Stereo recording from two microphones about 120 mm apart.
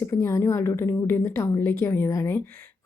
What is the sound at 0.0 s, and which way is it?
A woman's voice, 25° left (ahead or behind).